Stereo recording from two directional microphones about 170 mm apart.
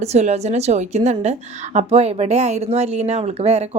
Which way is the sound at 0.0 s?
40° right (ahead or behind).